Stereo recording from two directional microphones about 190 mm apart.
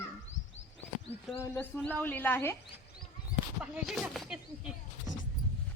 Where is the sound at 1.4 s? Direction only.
10° left (ahead or behind).